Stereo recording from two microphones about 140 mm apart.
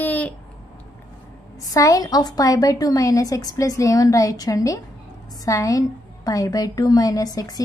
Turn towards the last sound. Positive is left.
turn(degrees=25)  # may be behind; listen again after turning